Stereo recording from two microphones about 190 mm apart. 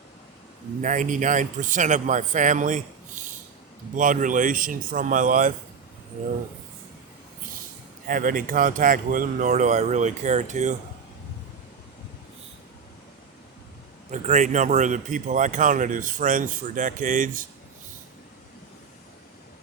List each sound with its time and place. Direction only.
0.8 s a man's voice: 40° right (ahead or behind)
8.0 s a man's voice: 45° right (ahead or behind)
14.1 s a man's voice: 40° right (ahead or behind)